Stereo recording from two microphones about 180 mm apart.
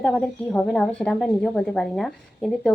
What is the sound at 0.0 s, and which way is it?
A woman's voice, 5° left (ahead or behind).